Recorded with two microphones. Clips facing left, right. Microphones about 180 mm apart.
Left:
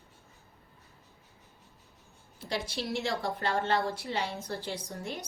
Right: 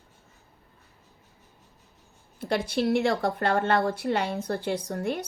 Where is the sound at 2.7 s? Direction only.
55° right (ahead or behind).